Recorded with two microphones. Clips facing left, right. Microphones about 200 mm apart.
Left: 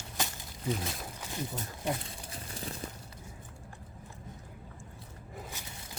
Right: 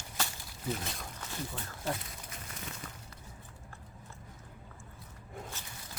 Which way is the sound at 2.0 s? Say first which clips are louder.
Left 3 dB; 30° left (ahead or behind).